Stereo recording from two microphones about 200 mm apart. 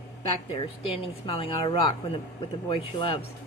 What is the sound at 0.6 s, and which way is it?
Speech, 30° left (ahead or behind).